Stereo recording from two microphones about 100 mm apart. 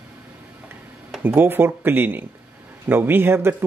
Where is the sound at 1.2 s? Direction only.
20° right (ahead or behind).